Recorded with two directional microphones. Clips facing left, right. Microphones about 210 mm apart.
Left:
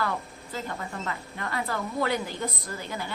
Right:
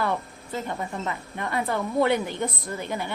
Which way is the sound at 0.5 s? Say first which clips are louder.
Right 4 dB; 20° right (ahead or behind).